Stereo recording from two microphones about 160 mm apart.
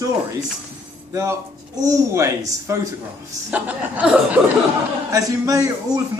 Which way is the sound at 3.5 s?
10° right (ahead or behind).